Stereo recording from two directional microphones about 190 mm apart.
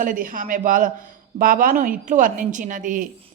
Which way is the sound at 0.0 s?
45° right (ahead or behind).